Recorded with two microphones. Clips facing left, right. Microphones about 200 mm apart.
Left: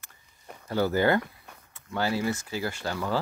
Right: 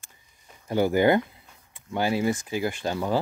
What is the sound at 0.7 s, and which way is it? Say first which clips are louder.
Speech: right 3 dB; 15° right (ahead or behind).